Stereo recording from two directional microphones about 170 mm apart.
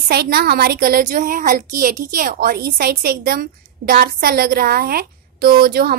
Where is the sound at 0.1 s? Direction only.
65° right (ahead or behind).